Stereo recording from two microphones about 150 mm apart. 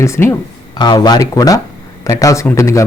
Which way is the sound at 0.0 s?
20° left (ahead or behind).